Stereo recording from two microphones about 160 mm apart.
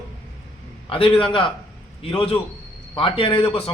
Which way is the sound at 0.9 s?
35° left (ahead or behind).